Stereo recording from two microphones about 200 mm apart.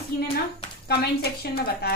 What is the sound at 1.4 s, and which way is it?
Speech, 50° left (ahead or behind).